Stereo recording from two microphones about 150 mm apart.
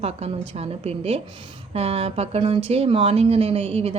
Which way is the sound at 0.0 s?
45° right (ahead or behind).